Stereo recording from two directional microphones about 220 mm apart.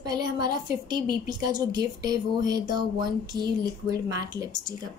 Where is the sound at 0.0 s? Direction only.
20° right (ahead or behind).